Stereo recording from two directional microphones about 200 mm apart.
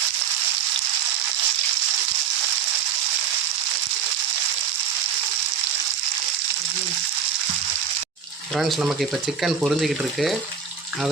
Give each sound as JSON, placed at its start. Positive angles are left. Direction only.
{"t": 8.5, "sound": "speech", "side_deg": -5}